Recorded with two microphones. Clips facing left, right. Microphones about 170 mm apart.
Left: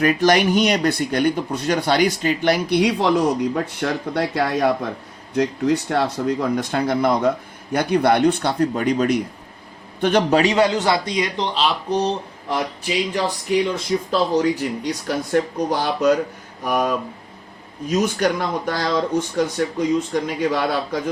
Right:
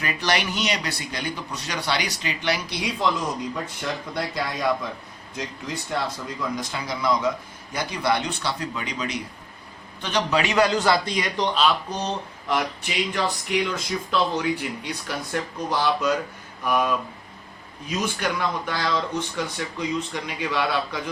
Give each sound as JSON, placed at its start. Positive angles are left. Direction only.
{"t": 0.0, "sound": "speech", "side_deg": 50}
{"t": 10.4, "sound": "speech", "side_deg": 25}